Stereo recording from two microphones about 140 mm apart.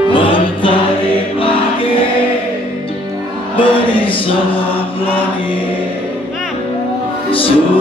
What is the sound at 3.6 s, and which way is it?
Music, 40° left (ahead or behind).